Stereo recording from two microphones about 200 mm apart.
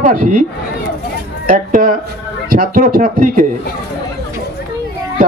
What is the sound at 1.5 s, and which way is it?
Speech, 45° right (ahead or behind).